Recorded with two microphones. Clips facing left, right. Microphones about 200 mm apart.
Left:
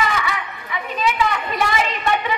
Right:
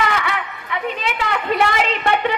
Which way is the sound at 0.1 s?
60° right (ahead or behind).